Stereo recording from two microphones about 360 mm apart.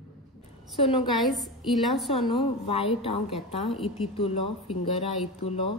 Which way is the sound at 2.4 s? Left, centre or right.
Centre.